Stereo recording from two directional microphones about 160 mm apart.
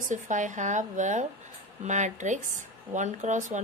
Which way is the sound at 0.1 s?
50° right (ahead or behind).